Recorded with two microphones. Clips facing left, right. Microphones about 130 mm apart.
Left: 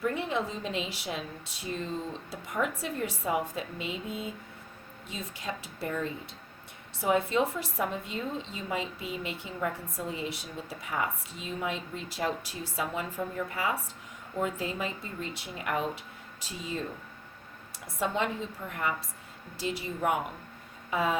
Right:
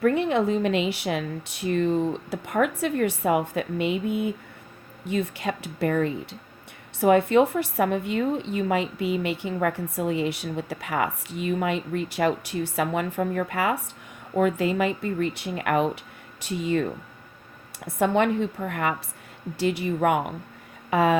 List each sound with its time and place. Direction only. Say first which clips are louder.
0.0 s a woman's voice: right 9 dB; 65° right (ahead or behind)
17.8 s a woman's voice: right 9 dB; 60° right (ahead or behind)